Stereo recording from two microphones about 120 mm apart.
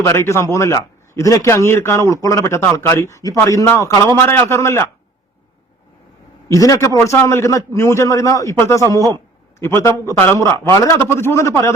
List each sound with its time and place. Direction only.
0.0 s a man's voice: 25° left (ahead or behind)
6.5 s a man's voice: 30° left (ahead or behind)